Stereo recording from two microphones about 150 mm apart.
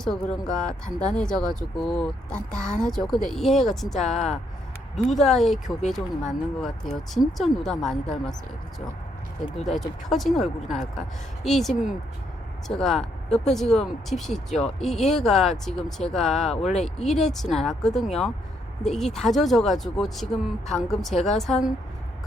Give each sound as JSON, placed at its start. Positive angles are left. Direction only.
{"t": 0.0, "sound": "speech", "side_deg": 5}
{"t": 4.0, "sound": "speech", "side_deg": 50}
{"t": 5.0, "sound": "speech", "side_deg": 0}
{"t": 9.6, "sound": "speech", "side_deg": 0}
{"t": 16.6, "sound": "speech", "side_deg": 45}
{"t": 16.8, "sound": "speech", "side_deg": 5}